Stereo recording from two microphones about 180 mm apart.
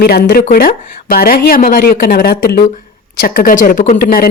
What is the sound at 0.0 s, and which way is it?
Speech, 60° left (ahead or behind).